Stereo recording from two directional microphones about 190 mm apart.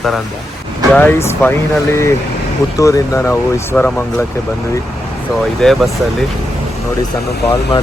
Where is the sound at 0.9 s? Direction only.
10° left (ahead or behind).